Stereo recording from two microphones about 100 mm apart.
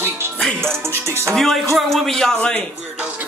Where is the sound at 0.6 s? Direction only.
25° right (ahead or behind).